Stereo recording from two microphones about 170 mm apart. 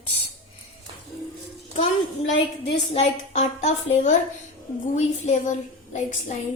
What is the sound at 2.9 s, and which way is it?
A woman's voice, 40° left (ahead or behind).